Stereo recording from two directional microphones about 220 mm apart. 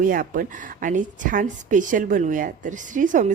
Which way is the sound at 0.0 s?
40° right (ahead or behind).